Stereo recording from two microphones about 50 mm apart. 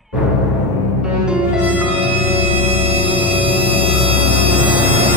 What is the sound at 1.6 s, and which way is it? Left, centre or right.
Music, right.